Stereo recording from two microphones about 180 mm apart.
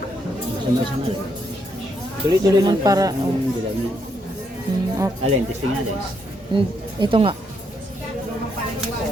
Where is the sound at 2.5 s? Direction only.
20° right (ahead or behind).